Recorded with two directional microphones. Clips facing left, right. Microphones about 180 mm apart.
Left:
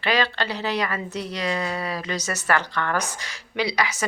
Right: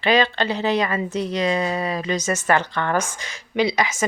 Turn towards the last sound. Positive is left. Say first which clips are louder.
# right 4 dB
turn(degrees=-20)  # may be behind; listen again after turning